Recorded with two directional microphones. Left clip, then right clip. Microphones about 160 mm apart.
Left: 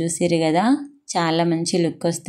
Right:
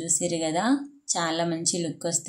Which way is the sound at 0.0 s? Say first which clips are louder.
Left 7 dB; 30° left (ahead or behind).